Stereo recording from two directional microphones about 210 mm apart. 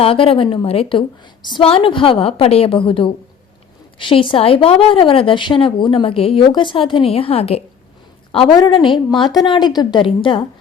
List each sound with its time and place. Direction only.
0.0 s a woman's voice: 25° left (ahead or behind)